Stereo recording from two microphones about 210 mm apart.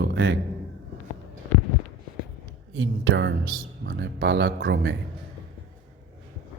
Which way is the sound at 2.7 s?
65° right (ahead or behind).